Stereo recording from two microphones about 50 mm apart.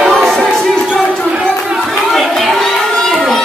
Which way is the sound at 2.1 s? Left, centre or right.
Centre.